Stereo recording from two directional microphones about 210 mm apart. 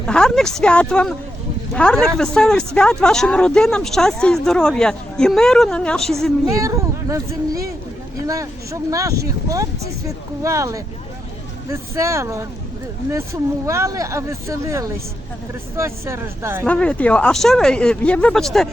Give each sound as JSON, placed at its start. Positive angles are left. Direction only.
{"t": 0.0, "sound": "speech", "side_deg": 5}
{"t": 6.5, "sound": "speech", "side_deg": -15}
{"t": 16.6, "sound": "speech", "side_deg": 5}